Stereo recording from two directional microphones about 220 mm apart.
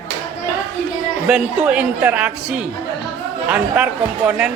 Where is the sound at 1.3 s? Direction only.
5° right (ahead or behind).